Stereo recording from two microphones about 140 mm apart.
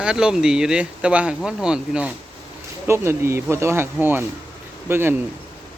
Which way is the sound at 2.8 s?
20° right (ahead or behind).